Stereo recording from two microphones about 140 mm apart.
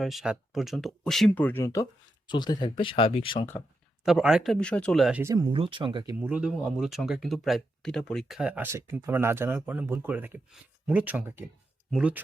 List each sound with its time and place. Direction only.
0.0 s speech: centre (ahead or behind)
1.5 s speech: 20° left (ahead or behind); by 3.4 s 40° left (ahead or behind)
4.0 s speech: 5° right (ahead or behind)
5.2 s speech: 25° right (ahead or behind)
5.5 s speech: 40° right (ahead or behind)
6.1 s speech: 10° right (ahead or behind)